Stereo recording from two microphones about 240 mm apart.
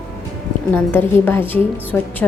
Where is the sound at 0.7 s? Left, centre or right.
Centre.